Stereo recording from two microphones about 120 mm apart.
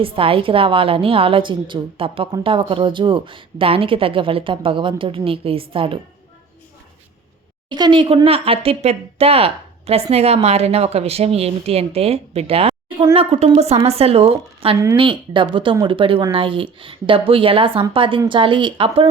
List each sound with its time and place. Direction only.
0.0 s a woman's voice: 50° right (ahead or behind)
7.7 s a woman's voice: 40° right (ahead or behind)